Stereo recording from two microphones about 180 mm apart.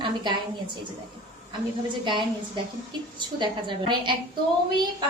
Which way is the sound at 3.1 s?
25° right (ahead or behind).